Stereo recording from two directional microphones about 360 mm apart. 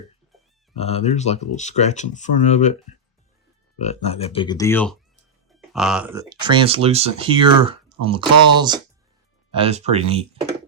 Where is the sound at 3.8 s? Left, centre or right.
Centre.